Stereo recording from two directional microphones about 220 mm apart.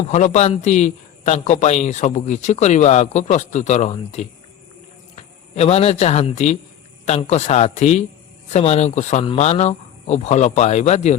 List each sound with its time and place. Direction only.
0.0 s a man's voice: 30° left (ahead or behind)